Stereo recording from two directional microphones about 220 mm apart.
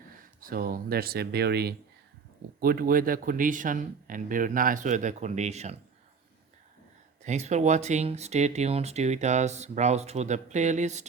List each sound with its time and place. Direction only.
0.3 s speech: 40° right (ahead or behind)
7.3 s speech: 30° right (ahead or behind)